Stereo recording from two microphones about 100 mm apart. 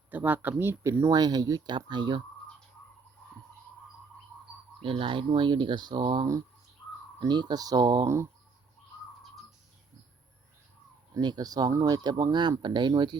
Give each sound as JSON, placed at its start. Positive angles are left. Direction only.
{"t": 0.1, "sound": "speech", "side_deg": -15}
{"t": 1.1, "sound": "speech", "side_deg": -45}
{"t": 4.8, "sound": "speech", "side_deg": -60}
{"t": 8.0, "sound": "speech", "side_deg": -30}
{"t": 11.1, "sound": "speech", "side_deg": -45}